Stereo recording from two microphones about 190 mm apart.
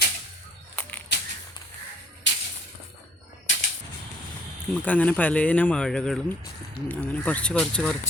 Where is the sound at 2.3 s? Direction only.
70° left (ahead or behind).